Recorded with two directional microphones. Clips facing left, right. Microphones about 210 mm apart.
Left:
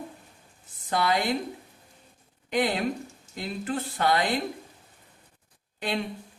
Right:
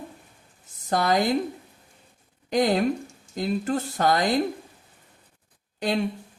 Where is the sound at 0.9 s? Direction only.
40° right (ahead or behind).